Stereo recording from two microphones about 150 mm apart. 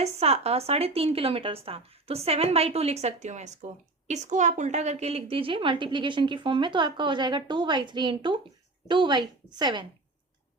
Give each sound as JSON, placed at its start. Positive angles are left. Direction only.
{"t": 0.0, "sound": "a woman's voice", "side_deg": -45}